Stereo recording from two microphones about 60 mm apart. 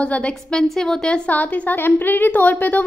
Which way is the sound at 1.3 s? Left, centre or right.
Left.